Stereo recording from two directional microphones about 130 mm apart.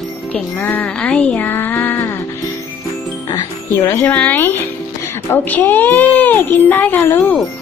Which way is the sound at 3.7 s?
20° left (ahead or behind).